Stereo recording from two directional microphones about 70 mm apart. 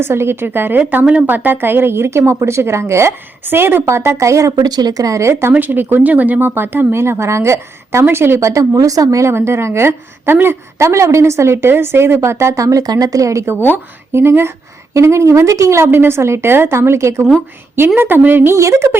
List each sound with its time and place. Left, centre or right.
0.0 s speech: right
4.5 s speech: right
5.5 s speech: right
17.7 s speech: right
18.5 s speech: right